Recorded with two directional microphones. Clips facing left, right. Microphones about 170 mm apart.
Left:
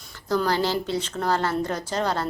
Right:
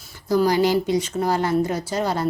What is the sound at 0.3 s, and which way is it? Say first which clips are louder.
A woman's voice: right 5 dB; 10° right (ahead or behind).